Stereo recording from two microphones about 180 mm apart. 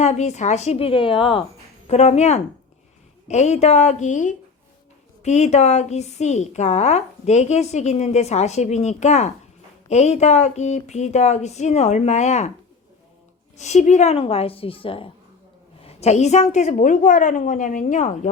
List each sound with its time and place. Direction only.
0.0 s a woman's voice: 40° left (ahead or behind)
13.6 s a woman's voice: 40° left (ahead or behind)